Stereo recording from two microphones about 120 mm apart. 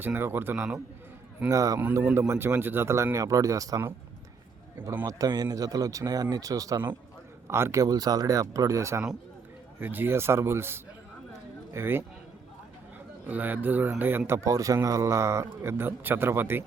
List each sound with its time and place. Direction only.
0.0 s a man's voice: 20° right (ahead or behind)
1.8 s a man's voice: 15° right (ahead or behind)
5.0 s a man's voice: 30° right (ahead or behind)
13.2 s a man's voice: 15° right (ahead or behind)